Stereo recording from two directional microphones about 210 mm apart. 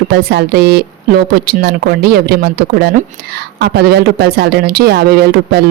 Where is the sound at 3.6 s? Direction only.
50° right (ahead or behind).